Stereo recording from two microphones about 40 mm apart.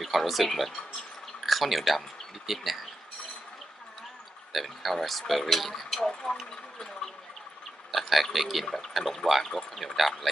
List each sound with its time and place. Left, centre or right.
0.0 s speech: centre
4.5 s speech: centre
6.0 s speech: centre
7.9 s speech: centre
9.8 s speech: centre